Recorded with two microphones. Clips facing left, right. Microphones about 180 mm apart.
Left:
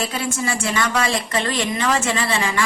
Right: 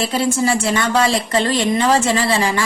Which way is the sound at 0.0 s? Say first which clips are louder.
Right 6 dB; 30° right (ahead or behind).